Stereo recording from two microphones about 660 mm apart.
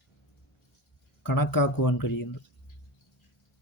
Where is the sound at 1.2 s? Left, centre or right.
Left.